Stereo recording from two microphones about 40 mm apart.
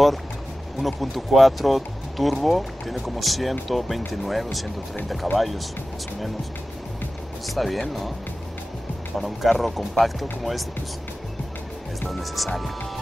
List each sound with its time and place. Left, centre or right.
0.7 s speech: centre
7.5 s speech: centre
9.2 s speech: centre
12.1 s speech: centre